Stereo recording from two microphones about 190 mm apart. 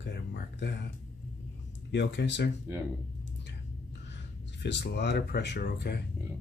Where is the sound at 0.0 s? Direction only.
65° left (ahead or behind).